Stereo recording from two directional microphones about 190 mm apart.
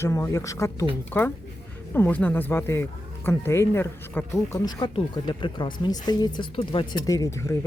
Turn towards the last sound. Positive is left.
turn(degrees=15)  # may be behind; listen again after turning